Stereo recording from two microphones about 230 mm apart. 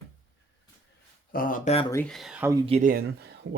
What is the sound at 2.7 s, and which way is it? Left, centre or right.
Speech, right.